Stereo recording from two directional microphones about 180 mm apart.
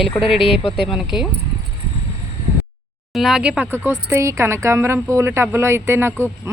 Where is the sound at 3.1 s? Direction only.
Centre (ahead or behind).